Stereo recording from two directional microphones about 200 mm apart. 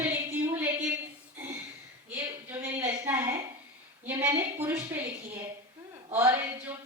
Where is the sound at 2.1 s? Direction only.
10° right (ahead or behind).